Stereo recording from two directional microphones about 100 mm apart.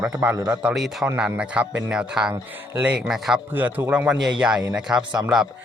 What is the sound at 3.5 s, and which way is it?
A man's voice, 20° right (ahead or behind).